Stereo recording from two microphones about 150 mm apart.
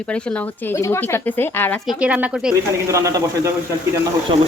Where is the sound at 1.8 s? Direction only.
10° right (ahead or behind).